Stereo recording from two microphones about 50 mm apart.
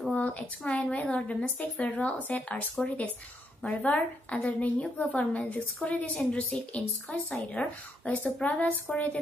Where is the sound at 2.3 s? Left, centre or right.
Left.